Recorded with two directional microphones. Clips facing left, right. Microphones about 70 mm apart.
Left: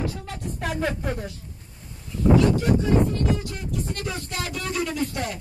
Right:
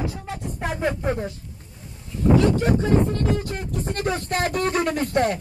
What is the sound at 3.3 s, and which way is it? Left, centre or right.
Speech, right.